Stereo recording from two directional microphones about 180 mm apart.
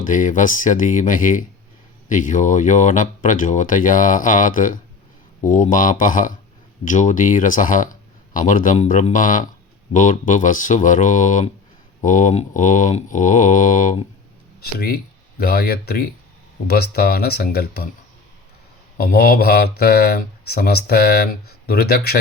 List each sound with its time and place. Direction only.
0.0 s speech: 45° left (ahead or behind)
14.6 s speech: 60° left (ahead or behind)
18.9 s speech: 55° left (ahead or behind)